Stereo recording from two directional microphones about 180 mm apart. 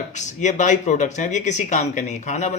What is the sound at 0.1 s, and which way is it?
Speech, 40° left (ahead or behind).